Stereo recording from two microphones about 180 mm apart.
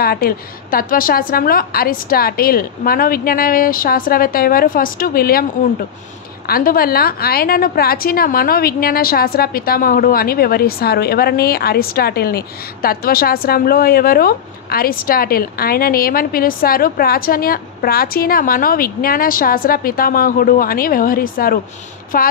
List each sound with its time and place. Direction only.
0.0 s a woman's voice: 60° left (ahead or behind)